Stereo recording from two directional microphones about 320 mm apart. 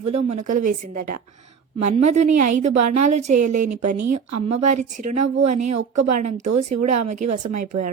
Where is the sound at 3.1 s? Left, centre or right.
Right.